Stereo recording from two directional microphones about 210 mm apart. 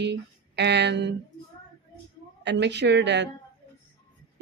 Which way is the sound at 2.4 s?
55° right (ahead or behind).